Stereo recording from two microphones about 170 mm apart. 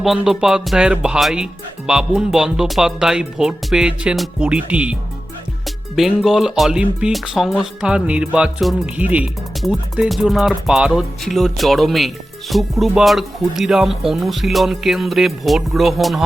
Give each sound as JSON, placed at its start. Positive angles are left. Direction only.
{"t": 0.0, "sound": "speech", "side_deg": 0}
{"t": 6.0, "sound": "speech", "side_deg": 0}